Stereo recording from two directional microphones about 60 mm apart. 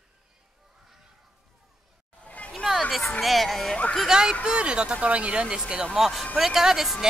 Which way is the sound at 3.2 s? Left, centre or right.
Centre.